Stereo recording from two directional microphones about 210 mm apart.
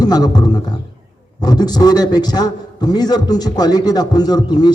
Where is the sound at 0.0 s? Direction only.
20° left (ahead or behind).